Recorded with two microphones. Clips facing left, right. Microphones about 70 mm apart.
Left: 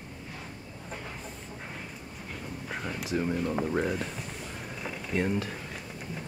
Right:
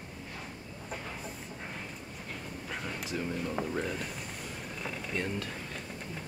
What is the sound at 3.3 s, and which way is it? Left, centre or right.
Speech, centre.